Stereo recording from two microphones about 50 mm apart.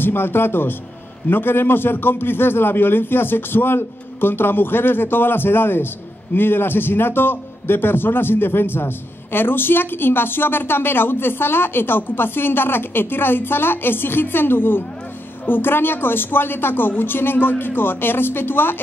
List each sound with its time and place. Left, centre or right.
0.0 s a man's voice: left